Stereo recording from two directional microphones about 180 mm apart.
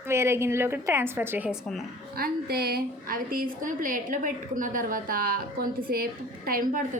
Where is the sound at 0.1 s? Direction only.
15° right (ahead or behind).